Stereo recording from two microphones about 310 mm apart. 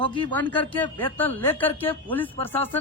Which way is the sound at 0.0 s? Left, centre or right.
Centre.